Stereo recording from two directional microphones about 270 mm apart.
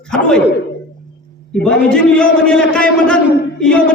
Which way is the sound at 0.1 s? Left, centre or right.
Centre.